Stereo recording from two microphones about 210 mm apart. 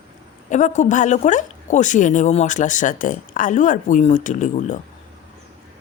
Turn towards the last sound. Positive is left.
turn(degrees=35)  # may be behind; listen again after turning